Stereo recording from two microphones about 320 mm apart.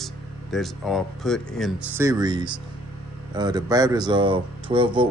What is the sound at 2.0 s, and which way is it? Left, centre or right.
Speech, centre.